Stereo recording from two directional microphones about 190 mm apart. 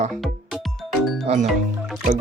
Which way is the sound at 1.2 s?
35° right (ahead or behind).